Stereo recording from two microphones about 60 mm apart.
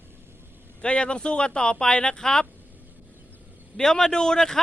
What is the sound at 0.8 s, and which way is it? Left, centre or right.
Speech, centre.